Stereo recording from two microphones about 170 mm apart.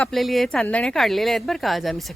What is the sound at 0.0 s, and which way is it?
Speech, centre (ahead or behind).